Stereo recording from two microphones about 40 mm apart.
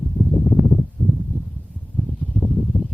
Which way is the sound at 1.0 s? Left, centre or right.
Right.